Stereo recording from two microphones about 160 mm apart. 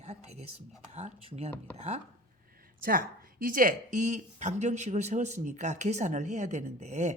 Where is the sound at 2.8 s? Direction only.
65° right (ahead or behind).